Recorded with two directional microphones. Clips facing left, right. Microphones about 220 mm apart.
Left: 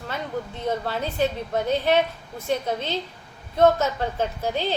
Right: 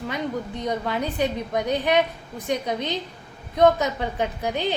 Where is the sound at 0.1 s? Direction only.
15° right (ahead or behind).